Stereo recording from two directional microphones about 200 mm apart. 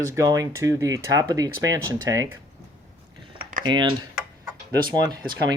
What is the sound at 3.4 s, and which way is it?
Typing, 45° right (ahead or behind).